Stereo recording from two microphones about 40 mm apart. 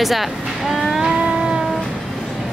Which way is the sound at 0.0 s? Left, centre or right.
Centre.